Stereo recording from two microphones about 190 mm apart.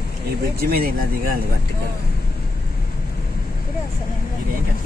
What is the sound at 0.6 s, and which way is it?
Speech, 50° right (ahead or behind).